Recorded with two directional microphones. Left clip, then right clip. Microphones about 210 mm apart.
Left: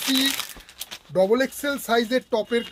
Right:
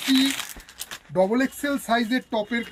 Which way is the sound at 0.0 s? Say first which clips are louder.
Even; 50° left (ahead or behind).